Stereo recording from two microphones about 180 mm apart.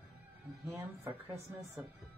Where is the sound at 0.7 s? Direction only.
15° right (ahead or behind).